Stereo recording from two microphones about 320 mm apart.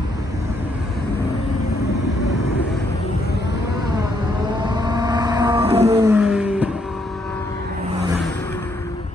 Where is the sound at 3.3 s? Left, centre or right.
Left.